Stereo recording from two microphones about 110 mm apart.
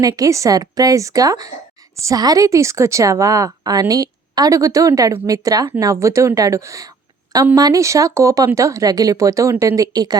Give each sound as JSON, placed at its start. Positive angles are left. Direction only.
{"t": 0.0, "sound": "a woman's voice", "side_deg": -30}